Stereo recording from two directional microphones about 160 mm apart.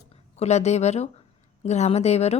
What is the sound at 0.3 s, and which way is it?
A woman's voice, 45° left (ahead or behind).